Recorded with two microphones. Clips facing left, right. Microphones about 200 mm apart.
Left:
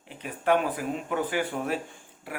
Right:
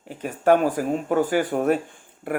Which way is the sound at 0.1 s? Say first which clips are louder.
Right 6 dB; 45° right (ahead or behind).